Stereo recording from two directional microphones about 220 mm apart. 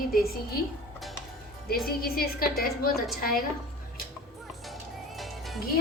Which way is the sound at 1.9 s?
45° left (ahead or behind).